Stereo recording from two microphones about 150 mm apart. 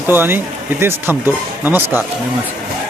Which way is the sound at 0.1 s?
15° right (ahead or behind).